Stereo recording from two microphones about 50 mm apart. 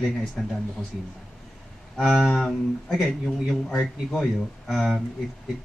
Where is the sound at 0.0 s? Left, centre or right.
Centre.